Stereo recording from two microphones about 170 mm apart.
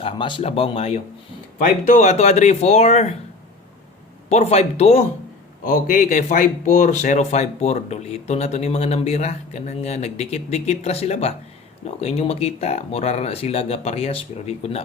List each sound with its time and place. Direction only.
0.0 s speech: 30° left (ahead or behind)
1.5 s speech: 50° left (ahead or behind)
4.3 s speech: 40° left (ahead or behind)
5.6 s speech: 50° left (ahead or behind); by 14.8 s 35° left (ahead or behind)